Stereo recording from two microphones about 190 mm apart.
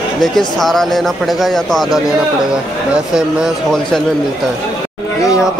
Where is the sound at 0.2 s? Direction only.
Centre (ahead or behind).